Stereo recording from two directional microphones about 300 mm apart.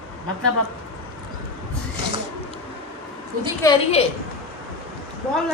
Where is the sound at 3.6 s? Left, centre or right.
Centre.